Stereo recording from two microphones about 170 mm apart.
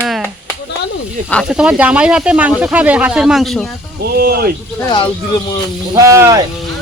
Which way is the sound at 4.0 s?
65° right (ahead or behind).